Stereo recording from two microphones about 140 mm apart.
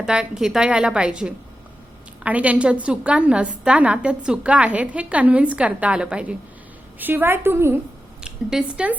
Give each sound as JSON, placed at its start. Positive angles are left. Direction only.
{"t": 0.0, "sound": "a woman's voice", "side_deg": -5}
{"t": 8.2, "sound": "speech", "side_deg": -5}